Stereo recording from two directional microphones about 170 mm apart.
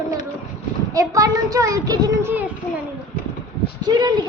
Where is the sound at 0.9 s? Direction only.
20° right (ahead or behind).